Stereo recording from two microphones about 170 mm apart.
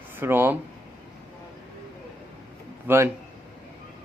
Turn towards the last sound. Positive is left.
turn(degrees=-15)  # may be behind; listen again after turning